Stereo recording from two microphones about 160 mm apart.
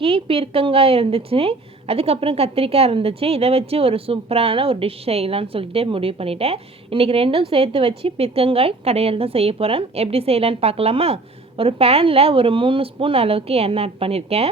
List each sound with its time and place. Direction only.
0.0 s a woman's voice: 35° right (ahead or behind)